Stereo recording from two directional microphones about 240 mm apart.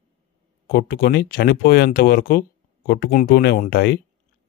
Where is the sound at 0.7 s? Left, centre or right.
Left.